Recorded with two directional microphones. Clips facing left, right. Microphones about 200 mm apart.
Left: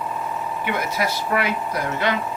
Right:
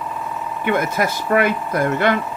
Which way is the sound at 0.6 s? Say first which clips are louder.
Right 6 dB; 50° right (ahead or behind).